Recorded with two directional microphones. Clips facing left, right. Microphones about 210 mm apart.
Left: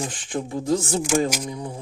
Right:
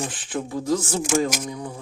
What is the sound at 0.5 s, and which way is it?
Speech, 25° left (ahead or behind).